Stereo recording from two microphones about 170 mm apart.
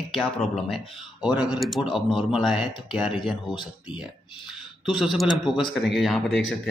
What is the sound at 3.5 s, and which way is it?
Speech, 25° left (ahead or behind).